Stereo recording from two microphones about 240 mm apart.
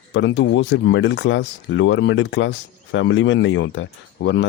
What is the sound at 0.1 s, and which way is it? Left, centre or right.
Speech, left.